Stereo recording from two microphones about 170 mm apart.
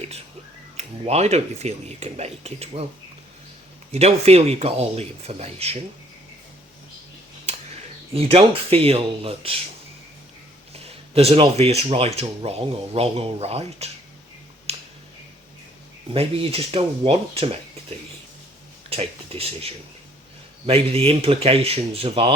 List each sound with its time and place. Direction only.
0.8 s speech: 40° right (ahead or behind)
3.9 s speech: 40° right (ahead or behind)
8.1 s speech: 35° right (ahead or behind)
11.1 s speech: 35° right (ahead or behind)
14.7 s finger snapping: 35° right (ahead or behind)
16.1 s speech: 35° right (ahead or behind)
18.9 s speech: 35° right (ahead or behind)